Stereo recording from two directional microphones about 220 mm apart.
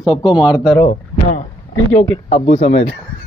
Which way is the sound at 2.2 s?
30° left (ahead or behind).